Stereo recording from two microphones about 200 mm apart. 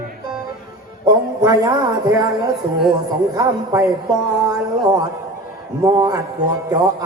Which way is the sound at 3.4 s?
20° right (ahead or behind).